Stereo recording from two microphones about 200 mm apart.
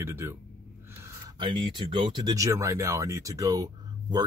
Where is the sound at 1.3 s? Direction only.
25° right (ahead or behind).